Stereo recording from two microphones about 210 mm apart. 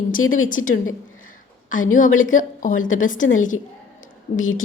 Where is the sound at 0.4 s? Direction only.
40° left (ahead or behind).